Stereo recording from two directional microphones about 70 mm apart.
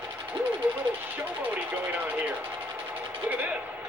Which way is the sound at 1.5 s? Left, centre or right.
Right.